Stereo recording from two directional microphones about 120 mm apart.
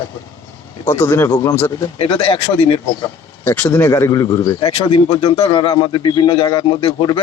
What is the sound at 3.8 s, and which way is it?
Speech, 30° left (ahead or behind).